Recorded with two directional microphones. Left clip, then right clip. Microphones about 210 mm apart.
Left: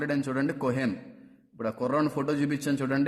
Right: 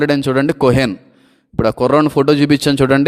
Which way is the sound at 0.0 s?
40° right (ahead or behind).